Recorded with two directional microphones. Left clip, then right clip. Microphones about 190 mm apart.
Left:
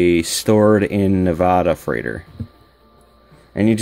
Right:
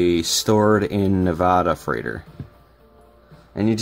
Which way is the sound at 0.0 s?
20° left (ahead or behind).